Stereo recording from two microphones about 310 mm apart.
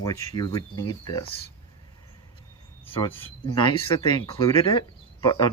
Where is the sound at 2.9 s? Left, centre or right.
Centre.